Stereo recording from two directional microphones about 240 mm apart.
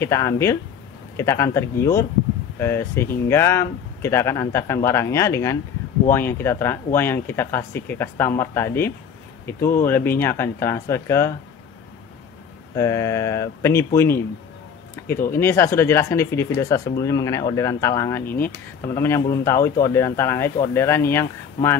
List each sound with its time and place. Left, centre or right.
0.0 s speech: centre
12.7 s speech: centre
15.0 s a sound: centre
15.3 s speech: centre